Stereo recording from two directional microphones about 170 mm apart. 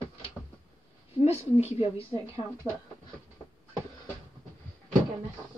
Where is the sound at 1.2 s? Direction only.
40° left (ahead or behind).